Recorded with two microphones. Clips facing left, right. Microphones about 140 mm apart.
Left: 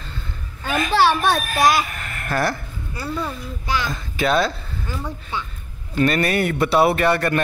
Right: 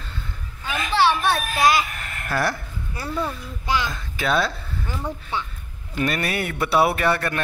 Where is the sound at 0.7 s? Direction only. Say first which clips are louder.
Left 3 dB; 45° left (ahead or behind).